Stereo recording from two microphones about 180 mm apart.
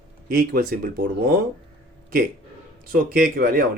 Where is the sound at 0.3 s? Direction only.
55° right (ahead or behind).